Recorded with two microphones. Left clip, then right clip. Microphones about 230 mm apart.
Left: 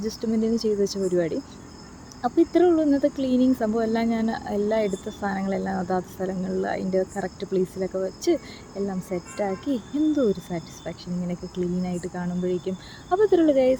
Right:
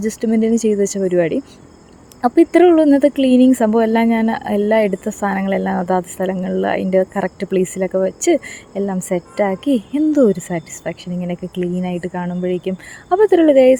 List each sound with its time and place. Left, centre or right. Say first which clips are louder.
0.0 s speech: right 8 dB; right